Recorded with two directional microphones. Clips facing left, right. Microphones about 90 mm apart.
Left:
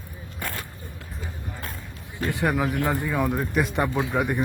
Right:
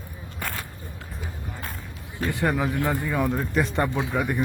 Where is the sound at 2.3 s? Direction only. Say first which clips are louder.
Even; 20° left (ahead or behind).